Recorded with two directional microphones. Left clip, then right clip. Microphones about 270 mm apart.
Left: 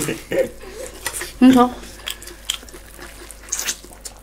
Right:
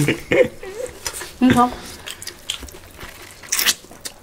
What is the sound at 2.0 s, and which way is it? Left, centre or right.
Chewing, left.